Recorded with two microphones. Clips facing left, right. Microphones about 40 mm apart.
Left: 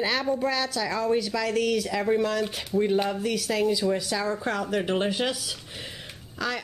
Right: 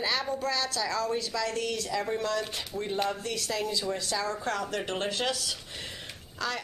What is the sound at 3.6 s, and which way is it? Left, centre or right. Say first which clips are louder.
Speech: left 7 dB; centre.